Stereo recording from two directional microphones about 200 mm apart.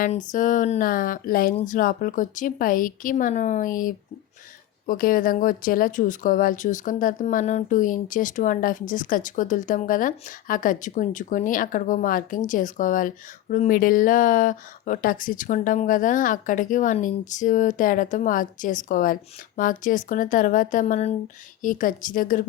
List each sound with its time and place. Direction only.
0.3 s speech: 40° left (ahead or behind)